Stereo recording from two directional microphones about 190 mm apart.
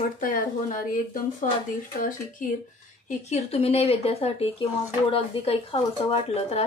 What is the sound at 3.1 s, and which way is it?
Speech, 35° left (ahead or behind).